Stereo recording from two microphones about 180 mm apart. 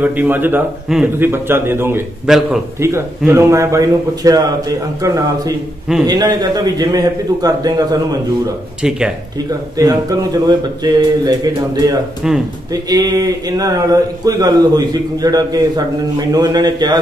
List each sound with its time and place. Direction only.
0.0 s a man's voice: 10° right (ahead or behind)
2.2 s a man's voice: 5° right (ahead or behind)
2.8 s a man's voice: 15° right (ahead or behind)
9.5 s speech: 20° right (ahead or behind)
12.2 s a man's voice: 5° right (ahead or behind)
12.7 s speech: 20° right (ahead or behind)